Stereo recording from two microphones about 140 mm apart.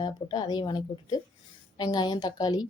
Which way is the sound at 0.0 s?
30° left (ahead or behind).